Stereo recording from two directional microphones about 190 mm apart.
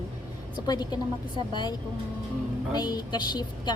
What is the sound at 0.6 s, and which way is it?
Speech, 20° left (ahead or behind).